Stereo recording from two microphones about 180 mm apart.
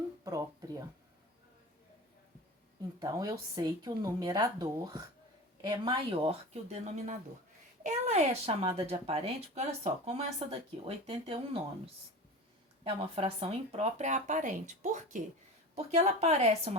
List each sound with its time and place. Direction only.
0.3 s a sound: 20° right (ahead or behind)
3.0 s speech: 20° right (ahead or behind)
12.8 s speech: 30° right (ahead or behind)